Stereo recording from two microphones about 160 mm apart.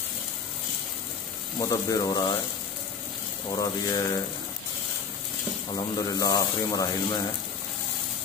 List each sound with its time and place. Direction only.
1.6 s speech: 20° left (ahead or behind)
3.4 s speech: 25° left (ahead or behind)
5.9 s speech: 25° left (ahead or behind)